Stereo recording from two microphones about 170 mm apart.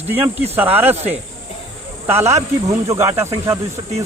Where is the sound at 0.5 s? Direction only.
10° right (ahead or behind).